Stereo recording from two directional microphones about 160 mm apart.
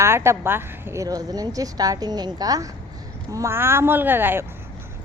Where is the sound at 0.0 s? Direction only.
15° right (ahead or behind).